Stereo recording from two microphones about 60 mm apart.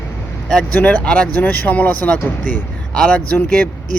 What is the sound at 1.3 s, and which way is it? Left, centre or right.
Speech, left.